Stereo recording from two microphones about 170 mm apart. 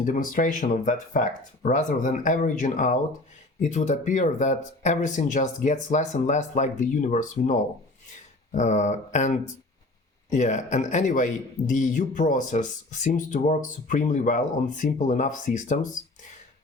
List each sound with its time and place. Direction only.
0.0 s speech: 50° left (ahead or behind)